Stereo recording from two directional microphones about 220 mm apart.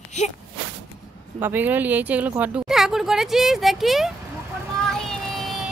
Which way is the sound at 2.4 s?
5° right (ahead or behind).